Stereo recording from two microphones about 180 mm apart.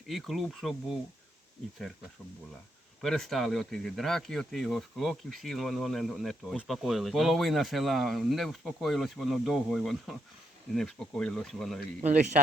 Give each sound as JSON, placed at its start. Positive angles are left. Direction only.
{"t": 0.1, "sound": "speech", "side_deg": 0}
{"t": 3.0, "sound": "speech", "side_deg": 5}